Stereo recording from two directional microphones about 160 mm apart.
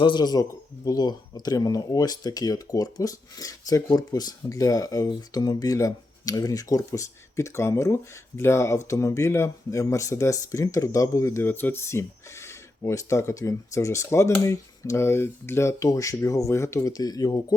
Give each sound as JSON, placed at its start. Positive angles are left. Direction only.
{"t": 0.0, "sound": "speech", "side_deg": 30}